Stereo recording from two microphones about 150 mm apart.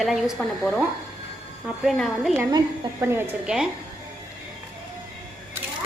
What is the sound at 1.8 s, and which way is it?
Speech, centre (ahead or behind).